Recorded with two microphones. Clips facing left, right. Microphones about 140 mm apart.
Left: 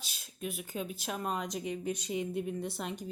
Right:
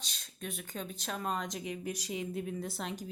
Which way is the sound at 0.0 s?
5° left (ahead or behind).